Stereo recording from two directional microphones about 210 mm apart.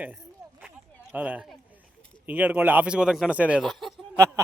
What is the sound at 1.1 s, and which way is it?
Speech, 5° right (ahead or behind).